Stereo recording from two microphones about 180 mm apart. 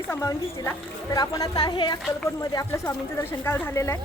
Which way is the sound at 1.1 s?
20° left (ahead or behind).